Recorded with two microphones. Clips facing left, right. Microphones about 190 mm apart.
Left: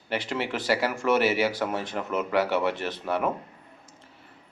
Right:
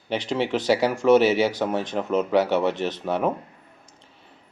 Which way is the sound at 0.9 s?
20° right (ahead or behind).